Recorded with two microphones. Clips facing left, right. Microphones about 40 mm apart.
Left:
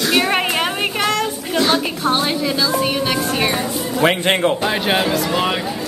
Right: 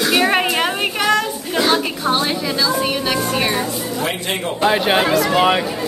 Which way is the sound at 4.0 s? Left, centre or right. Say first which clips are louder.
Left 9 dB; left.